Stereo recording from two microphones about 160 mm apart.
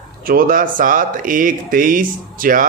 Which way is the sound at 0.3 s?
60° right (ahead or behind).